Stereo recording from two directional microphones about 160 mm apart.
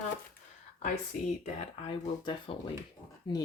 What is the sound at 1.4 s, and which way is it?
Speech, 35° left (ahead or behind).